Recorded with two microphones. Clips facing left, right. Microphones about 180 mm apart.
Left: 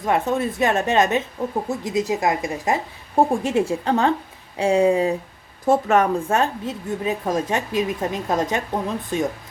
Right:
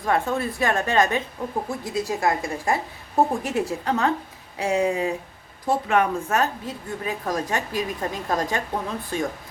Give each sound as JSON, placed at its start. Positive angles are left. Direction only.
{"t": 0.0, "sound": "a woman's voice", "side_deg": 20}